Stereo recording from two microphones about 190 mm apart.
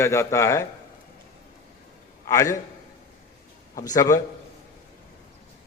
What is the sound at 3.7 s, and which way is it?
Speech, 20° left (ahead or behind).